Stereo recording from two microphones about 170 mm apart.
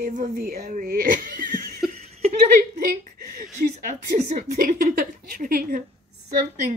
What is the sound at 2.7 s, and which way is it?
Speech, 55° right (ahead or behind).